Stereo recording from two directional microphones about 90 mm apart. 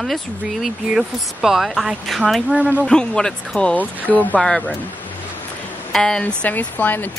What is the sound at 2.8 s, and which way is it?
Speech, 10° left (ahead or behind).